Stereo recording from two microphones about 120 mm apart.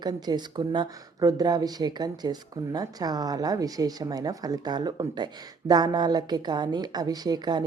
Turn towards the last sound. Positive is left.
turn(degrees=-35)  # may be behind; listen again after turning